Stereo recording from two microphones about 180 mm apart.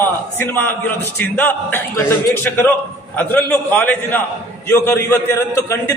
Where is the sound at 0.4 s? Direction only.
10° left (ahead or behind).